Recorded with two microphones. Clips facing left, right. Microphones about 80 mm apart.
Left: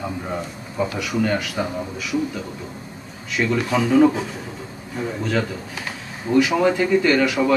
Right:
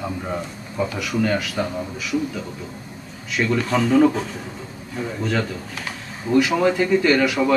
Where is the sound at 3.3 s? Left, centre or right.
Centre.